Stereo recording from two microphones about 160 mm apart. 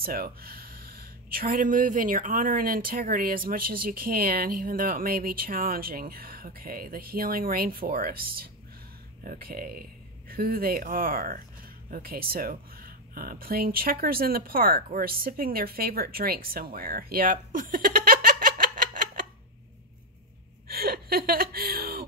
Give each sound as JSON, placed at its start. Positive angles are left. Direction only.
{"t": 0.0, "sound": "speech", "side_deg": -70}
{"t": 16.7, "sound": "giggle", "side_deg": -70}
{"t": 20.6, "sound": "gasp", "side_deg": -70}